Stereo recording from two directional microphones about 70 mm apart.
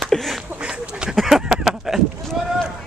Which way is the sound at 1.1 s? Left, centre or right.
Centre.